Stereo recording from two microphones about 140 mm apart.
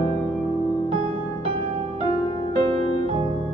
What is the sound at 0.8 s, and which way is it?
Music, 45° right (ahead or behind).